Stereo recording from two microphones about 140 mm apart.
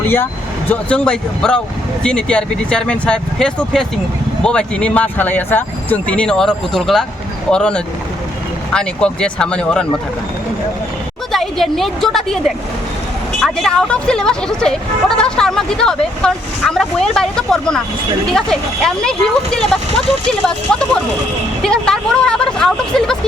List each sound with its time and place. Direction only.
0.7 s speech: 10° left (ahead or behind)
11.3 s a woman's voice: centre (ahead or behind)